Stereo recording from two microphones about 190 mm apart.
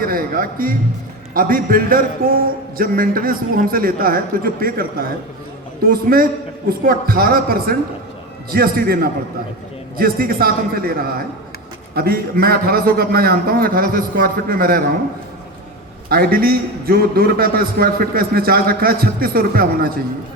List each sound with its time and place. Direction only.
0.0 s a man's voice: 50° right (ahead or behind)
16.0 s a man's voice: 55° right (ahead or behind)